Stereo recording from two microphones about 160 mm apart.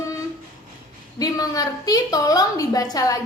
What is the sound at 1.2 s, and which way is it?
A woman's voice, 25° left (ahead or behind).